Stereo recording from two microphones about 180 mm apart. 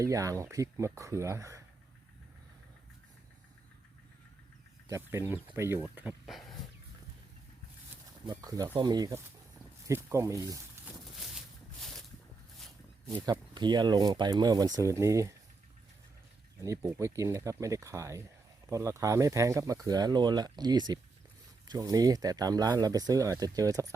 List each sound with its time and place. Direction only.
0.0 s speech: 20° right (ahead or behind)
4.9 s speech: 15° right (ahead or behind); by 6.6 s centre (ahead or behind)
8.3 s speech: 20° right (ahead or behind)
10.8 s a sound: centre (ahead or behind)
13.1 s speech: 20° right (ahead or behind)
16.6 s speech: 15° right (ahead or behind)